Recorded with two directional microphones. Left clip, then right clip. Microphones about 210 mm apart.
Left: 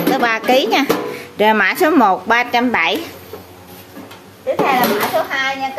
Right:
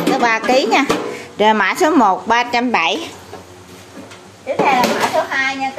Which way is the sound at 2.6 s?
20° right (ahead or behind).